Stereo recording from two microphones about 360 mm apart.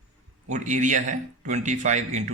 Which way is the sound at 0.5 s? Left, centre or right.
Centre.